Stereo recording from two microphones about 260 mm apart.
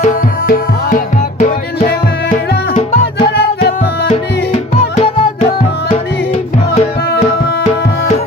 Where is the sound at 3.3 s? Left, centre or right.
Left.